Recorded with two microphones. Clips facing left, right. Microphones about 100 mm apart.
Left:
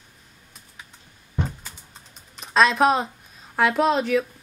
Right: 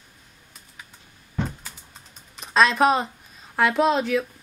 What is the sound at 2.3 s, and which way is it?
A woman's voice, centre (ahead or behind).